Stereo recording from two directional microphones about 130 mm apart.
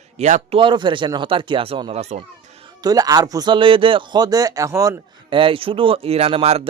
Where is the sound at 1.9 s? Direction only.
55° right (ahead or behind).